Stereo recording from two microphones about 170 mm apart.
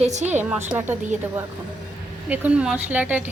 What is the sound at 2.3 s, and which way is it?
Speech, 5° right (ahead or behind).